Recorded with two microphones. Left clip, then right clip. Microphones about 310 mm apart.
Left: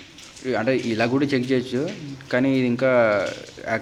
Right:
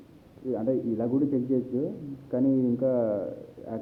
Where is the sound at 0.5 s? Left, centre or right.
Left.